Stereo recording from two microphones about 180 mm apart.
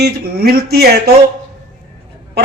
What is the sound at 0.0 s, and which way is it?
Speech, 60° right (ahead or behind).